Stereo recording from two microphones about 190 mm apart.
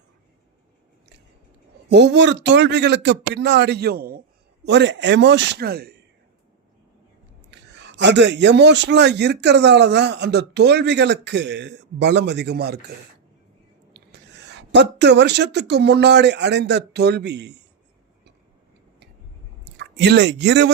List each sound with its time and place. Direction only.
1.9 s a man's voice: 65° right (ahead or behind)
4.6 s a man's voice: 65° right (ahead or behind)
7.5 s a man's voice: 65° right (ahead or behind)
13.9 s speech: 65° right (ahead or behind)
19.7 s speech: 60° right (ahead or behind)